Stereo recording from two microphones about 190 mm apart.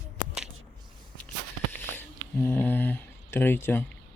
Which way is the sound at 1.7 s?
10° left (ahead or behind).